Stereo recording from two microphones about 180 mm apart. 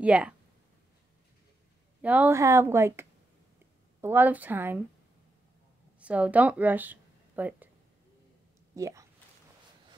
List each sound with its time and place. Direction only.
0.0 s speech: 5° right (ahead or behind)
2.0 s speech: 10° right (ahead or behind)
5.9 s speech: 5° right (ahead or behind)
8.7 s speech: 15° right (ahead or behind)